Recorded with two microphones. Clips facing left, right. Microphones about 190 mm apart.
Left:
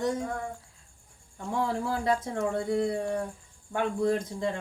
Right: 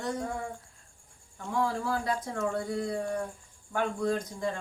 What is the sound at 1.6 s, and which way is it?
Speech, 25° left (ahead or behind).